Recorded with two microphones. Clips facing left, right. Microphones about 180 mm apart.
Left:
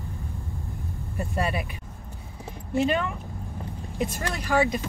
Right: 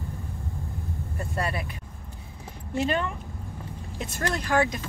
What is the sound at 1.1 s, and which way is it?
Speech, 15° left (ahead or behind).